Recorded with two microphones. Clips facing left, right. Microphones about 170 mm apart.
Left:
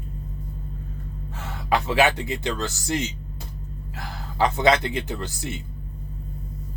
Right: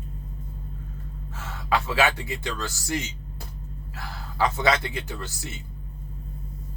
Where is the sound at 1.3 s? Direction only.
20° left (ahead or behind).